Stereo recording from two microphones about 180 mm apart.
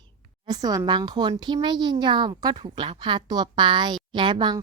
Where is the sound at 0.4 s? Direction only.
20° right (ahead or behind).